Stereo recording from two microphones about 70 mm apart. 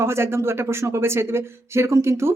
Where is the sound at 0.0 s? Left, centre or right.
Right.